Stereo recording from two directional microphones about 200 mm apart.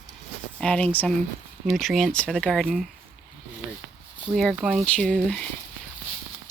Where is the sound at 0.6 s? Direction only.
5° left (ahead or behind).